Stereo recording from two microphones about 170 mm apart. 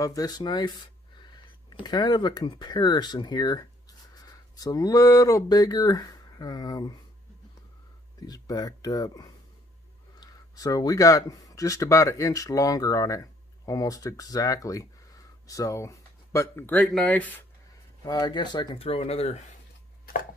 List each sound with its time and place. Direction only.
0.0 s speech: 20° left (ahead or behind)
8.2 s speech: 20° left (ahead or behind)
18.0 s speech: 25° left (ahead or behind)